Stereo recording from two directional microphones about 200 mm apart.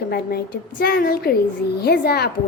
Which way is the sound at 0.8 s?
50° left (ahead or behind).